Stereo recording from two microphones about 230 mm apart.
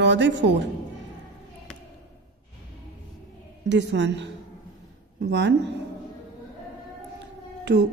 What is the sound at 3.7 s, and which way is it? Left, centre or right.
Speech, right.